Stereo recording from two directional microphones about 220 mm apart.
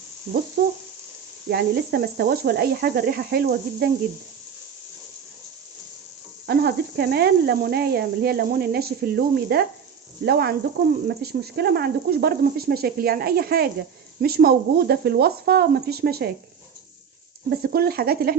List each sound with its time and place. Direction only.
0.6 s speech: 40° right (ahead or behind)
6.5 s speech: 45° right (ahead or behind)
17.5 s speech: 45° right (ahead or behind)